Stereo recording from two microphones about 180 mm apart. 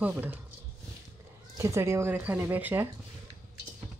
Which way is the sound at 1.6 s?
15° right (ahead or behind).